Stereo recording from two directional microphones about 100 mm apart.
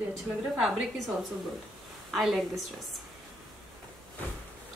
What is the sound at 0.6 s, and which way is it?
Speech, 5° right (ahead or behind).